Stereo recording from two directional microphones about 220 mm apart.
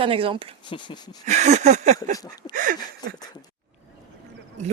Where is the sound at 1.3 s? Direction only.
30° right (ahead or behind).